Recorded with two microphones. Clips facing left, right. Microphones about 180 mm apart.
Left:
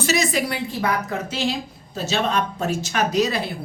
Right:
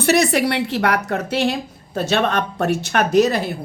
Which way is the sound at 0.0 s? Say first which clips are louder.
Right 6 dB; 60° right (ahead or behind).